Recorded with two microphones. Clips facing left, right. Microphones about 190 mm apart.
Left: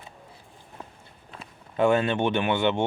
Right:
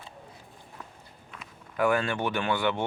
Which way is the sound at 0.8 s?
30° left (ahead or behind).